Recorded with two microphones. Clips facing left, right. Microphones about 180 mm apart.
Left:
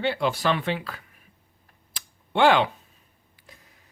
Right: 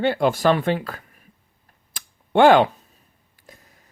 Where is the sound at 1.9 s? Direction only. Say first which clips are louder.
Right 6 dB; 50° right (ahead or behind).